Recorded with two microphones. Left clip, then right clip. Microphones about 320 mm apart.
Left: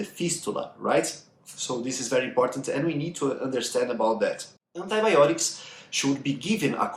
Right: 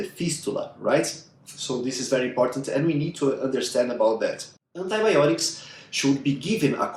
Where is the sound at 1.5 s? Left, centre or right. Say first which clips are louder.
Right 2 dB; centre.